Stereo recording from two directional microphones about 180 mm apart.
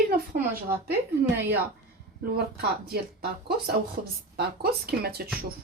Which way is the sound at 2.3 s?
60° right (ahead or behind).